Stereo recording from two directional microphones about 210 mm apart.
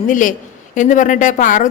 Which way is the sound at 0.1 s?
40° left (ahead or behind).